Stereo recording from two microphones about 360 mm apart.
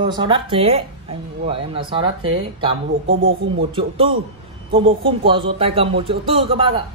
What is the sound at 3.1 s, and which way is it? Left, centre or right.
Speech, right.